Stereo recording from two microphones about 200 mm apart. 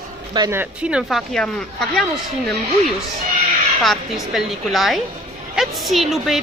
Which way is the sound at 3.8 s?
Centre (ahead or behind).